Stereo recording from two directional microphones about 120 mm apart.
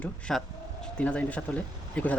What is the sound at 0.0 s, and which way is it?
Speech, 5° left (ahead or behind).